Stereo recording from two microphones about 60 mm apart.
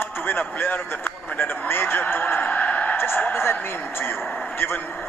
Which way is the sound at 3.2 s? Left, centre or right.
Left.